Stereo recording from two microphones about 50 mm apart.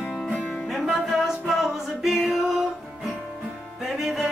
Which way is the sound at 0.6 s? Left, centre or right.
Centre.